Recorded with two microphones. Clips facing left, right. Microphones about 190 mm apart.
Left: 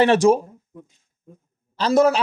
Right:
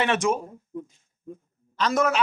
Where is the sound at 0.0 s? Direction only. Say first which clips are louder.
Left 8 dB; 35° left (ahead or behind).